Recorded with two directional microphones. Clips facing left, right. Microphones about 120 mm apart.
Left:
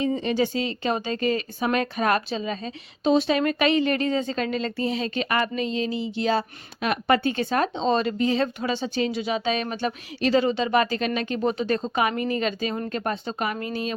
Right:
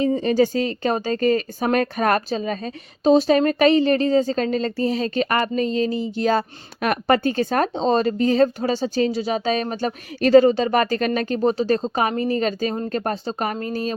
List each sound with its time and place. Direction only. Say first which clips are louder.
0.0 s speech: right 5 dB; 40° right (ahead or behind)